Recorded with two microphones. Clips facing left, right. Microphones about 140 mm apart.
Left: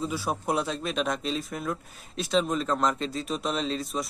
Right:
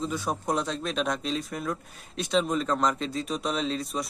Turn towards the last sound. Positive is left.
turn(degrees=0)  # may be behind; listen again after turning